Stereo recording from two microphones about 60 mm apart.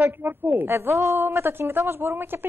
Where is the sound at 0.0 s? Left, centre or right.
Right.